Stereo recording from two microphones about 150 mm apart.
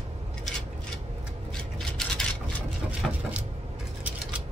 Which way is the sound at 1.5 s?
Centre (ahead or behind).